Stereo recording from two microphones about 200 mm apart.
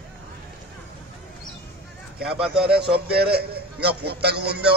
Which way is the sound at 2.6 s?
55° right (ahead or behind).